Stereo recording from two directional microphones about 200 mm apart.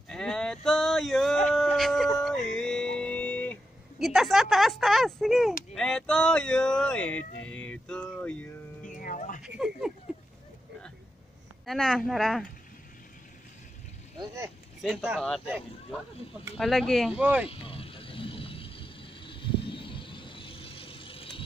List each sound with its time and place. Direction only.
0.1 s livestock: 5° left (ahead or behind)
1.5 s a sound: centre (ahead or behind)
2.1 s music: 5° left (ahead or behind)
4.0 s speech: centre (ahead or behind)
8.8 s music: 40° left (ahead or behind)
9.6 s speech: centre (ahead or behind)
11.6 s speech: centre (ahead or behind)
14.8 s speech: 5° right (ahead or behind)
17.5 s vehicle: 25° left (ahead or behind)